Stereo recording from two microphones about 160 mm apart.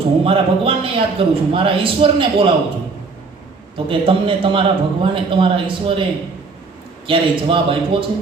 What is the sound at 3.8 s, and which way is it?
A man's voice, 35° right (ahead or behind).